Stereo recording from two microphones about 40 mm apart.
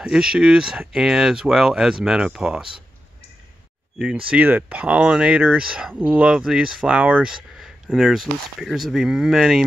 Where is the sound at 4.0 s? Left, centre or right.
Right.